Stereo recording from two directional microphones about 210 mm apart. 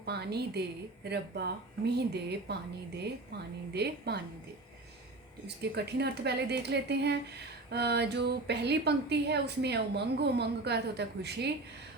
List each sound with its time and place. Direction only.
0.0 s a woman's voice: 50° right (ahead or behind)
5.7 s a woman's voice: 50° right (ahead or behind)